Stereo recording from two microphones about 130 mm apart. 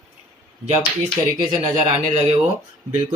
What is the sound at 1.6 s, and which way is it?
Speech, 65° right (ahead or behind).